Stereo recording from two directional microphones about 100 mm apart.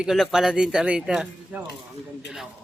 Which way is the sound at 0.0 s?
Centre (ahead or behind).